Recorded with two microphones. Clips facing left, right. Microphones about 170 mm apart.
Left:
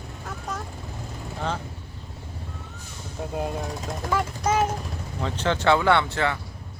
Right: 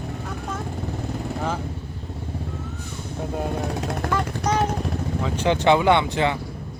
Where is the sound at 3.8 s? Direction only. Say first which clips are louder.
Right 5 dB; 65° right (ahead or behind).